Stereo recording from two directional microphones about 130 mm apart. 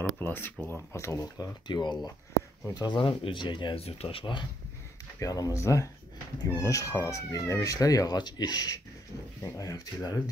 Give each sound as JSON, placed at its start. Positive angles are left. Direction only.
{"t": 0.2, "sound": "speech", "side_deg": 15}
{"t": 5.2, "sound": "speech", "side_deg": 25}